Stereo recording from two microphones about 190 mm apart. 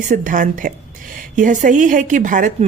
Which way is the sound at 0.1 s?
45° right (ahead or behind).